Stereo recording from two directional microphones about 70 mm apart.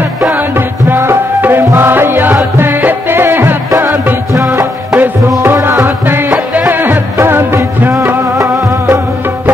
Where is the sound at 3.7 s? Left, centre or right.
Right.